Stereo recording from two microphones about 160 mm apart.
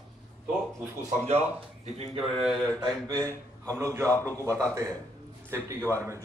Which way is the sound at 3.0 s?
25° right (ahead or behind).